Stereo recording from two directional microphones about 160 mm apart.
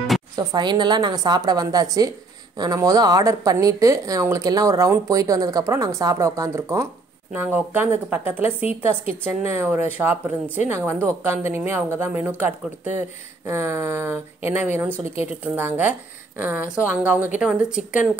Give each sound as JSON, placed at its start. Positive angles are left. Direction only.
{"t": 0.4, "sound": "a woman's voice", "side_deg": -25}